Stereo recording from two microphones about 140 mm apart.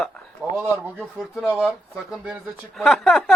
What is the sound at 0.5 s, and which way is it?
Speech, 10° right (ahead or behind).